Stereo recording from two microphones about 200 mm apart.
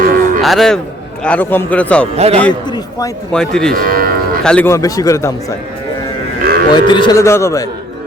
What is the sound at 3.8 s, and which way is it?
Speech, 45° right (ahead or behind).